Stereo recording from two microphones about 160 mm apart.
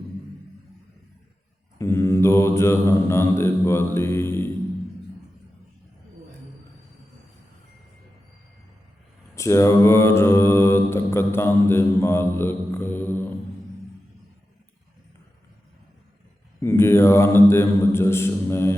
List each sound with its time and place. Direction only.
1.8 s mantra: 15° left (ahead or behind)
9.3 s mantra: 20° left (ahead or behind)
16.6 s mantra: 15° left (ahead or behind)